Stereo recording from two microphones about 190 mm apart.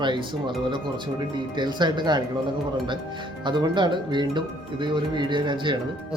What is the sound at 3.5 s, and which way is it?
Speech, 25° right (ahead or behind).